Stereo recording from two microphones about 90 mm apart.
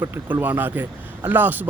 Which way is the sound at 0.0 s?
25° right (ahead or behind).